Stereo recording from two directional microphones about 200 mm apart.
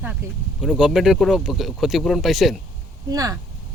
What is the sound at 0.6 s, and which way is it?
Speech, centre (ahead or behind).